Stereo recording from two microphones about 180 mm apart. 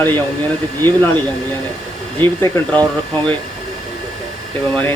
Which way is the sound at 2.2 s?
10° left (ahead or behind).